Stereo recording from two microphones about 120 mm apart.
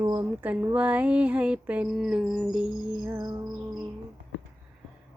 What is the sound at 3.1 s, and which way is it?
Music, 30° right (ahead or behind).